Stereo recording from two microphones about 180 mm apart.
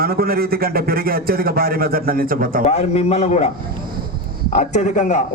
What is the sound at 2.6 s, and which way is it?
Speech, 35° left (ahead or behind).